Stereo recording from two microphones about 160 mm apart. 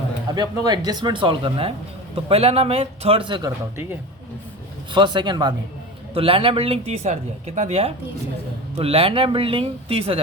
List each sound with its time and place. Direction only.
0.3 s speech: 25° right (ahead or behind)
4.9 s speech: 30° right (ahead or behind)